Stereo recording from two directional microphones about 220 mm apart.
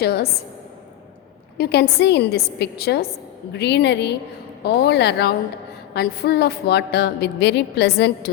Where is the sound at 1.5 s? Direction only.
45° left (ahead or behind).